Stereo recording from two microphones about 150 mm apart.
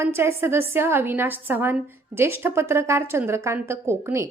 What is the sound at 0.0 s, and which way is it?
A woman's voice, 15° right (ahead or behind).